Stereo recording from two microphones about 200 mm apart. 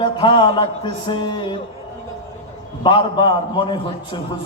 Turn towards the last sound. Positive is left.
turn(degrees=20)  # may be behind; listen again after turning